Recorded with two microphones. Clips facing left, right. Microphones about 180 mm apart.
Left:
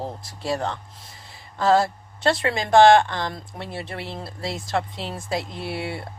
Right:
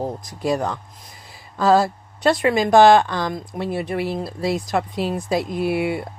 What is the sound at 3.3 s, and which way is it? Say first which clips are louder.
Speech: right 8 dB; 20° right (ahead or behind).